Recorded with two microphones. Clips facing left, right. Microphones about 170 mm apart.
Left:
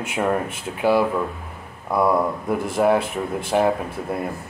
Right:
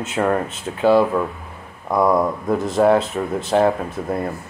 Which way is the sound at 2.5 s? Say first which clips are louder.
Right 4 dB; 10° left (ahead or behind).